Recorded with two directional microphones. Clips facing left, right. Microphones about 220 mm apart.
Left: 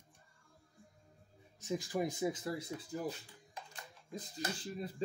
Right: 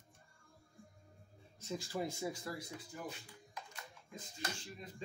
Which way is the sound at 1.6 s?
15° left (ahead or behind).